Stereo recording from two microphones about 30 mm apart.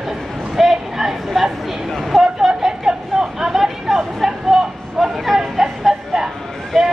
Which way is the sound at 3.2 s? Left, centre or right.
Centre.